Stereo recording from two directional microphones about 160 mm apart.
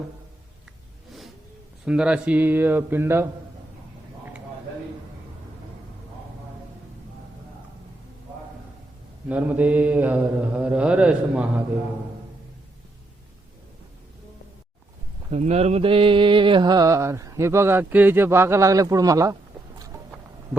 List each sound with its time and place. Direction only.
1.8 s mantra: 5° right (ahead or behind)
9.3 s mantra: 10° right (ahead or behind)
15.3 s mantra: 40° right (ahead or behind); by 19.4 s 20° right (ahead or behind)